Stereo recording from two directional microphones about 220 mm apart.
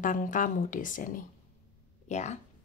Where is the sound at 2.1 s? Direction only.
30° left (ahead or behind).